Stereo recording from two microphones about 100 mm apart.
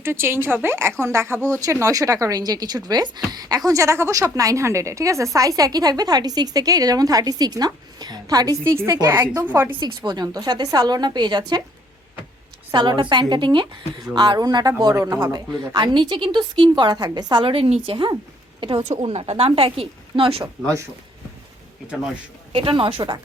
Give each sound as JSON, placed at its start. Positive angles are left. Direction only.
{"t": 0.0, "sound": "a woman's voice", "side_deg": -25}
{"t": 9.5, "sound": "a woman's voice", "side_deg": -20}
{"t": 9.8, "sound": "a woman's voice", "side_deg": -45}
{"t": 12.7, "sound": "a woman's voice", "side_deg": -50}
{"t": 14.9, "sound": "a woman's voice", "side_deg": -30}
{"t": 15.3, "sound": "a woman's voice", "side_deg": -45}
{"t": 17.4, "sound": "a woman's voice", "side_deg": -65}
{"t": 18.6, "sound": "speech", "side_deg": -75}
{"t": 22.5, "sound": "a woman's voice", "side_deg": -60}